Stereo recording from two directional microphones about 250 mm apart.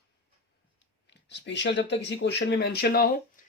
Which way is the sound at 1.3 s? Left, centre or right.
Left.